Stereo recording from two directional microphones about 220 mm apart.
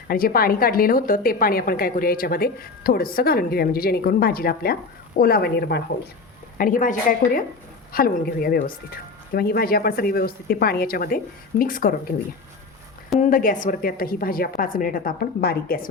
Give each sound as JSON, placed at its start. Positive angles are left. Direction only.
{"t": 0.1, "sound": "a woman's voice", "side_deg": 40}
{"t": 13.1, "sound": "a woman's voice", "side_deg": 35}